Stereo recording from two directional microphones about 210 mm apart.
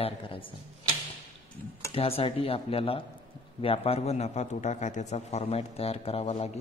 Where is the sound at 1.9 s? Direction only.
25° left (ahead or behind).